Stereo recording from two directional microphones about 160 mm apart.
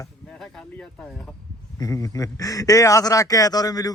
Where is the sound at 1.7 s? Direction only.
20° left (ahead or behind).